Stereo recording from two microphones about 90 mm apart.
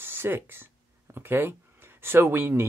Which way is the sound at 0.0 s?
25° right (ahead or behind).